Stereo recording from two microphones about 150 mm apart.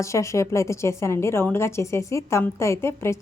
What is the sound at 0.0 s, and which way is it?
A woman's voice, 20° left (ahead or behind).